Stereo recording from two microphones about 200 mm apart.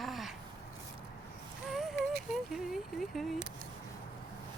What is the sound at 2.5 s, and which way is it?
Speech, centre (ahead or behind).